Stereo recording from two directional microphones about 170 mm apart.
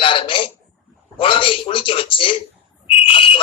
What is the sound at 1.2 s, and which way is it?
A man's voice, 30° left (ahead or behind).